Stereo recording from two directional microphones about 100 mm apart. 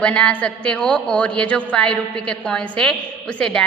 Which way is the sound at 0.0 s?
10° left (ahead or behind).